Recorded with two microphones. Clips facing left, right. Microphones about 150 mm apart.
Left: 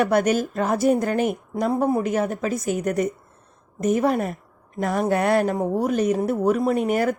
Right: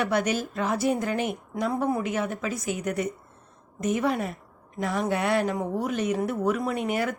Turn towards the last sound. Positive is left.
turn(degrees=40)  # may be behind; listen again after turning